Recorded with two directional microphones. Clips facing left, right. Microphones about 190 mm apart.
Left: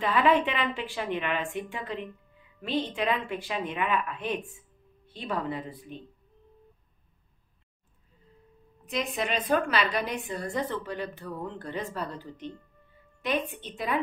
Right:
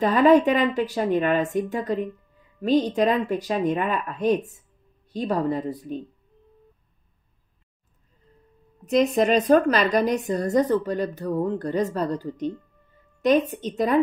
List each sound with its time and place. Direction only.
0.0 s a woman's voice: 40° right (ahead or behind)
8.8 s a woman's voice: 40° right (ahead or behind)